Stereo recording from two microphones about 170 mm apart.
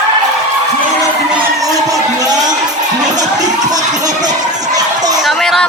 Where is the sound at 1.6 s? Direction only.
20° right (ahead or behind).